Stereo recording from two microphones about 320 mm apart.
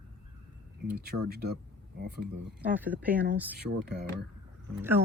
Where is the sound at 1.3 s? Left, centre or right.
Right.